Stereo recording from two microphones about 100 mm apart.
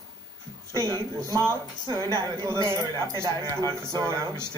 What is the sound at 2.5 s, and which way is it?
Speech, 40° left (ahead or behind).